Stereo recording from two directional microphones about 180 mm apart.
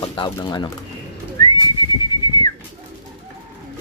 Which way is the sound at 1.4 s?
25° left (ahead or behind).